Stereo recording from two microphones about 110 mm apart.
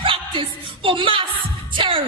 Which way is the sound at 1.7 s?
55° right (ahead or behind).